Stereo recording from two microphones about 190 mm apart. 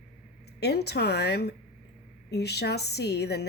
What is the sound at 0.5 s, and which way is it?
A woman's voice, 60° left (ahead or behind).